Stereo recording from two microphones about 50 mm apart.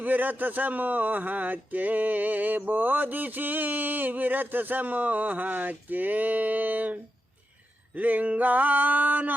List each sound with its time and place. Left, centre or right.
0.0 s speech: right